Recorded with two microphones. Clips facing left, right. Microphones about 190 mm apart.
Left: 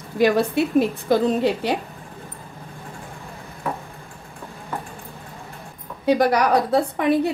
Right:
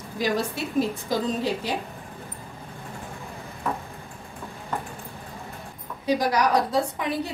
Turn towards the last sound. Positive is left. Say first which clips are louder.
# left 4 dB
turn(degrees=60)  # may be behind; listen again after turning